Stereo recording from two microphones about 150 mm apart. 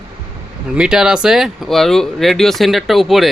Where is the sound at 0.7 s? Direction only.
5° right (ahead or behind).